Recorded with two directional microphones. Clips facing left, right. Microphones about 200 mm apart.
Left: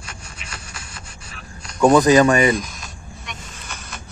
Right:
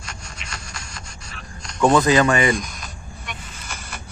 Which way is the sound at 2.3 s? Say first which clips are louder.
Left 3 dB; 35° left (ahead or behind).